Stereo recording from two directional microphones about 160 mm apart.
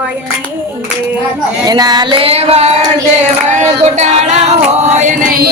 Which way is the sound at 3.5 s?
45° right (ahead or behind).